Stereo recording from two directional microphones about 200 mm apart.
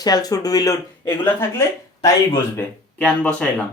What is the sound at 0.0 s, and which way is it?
Speech, 20° left (ahead or behind).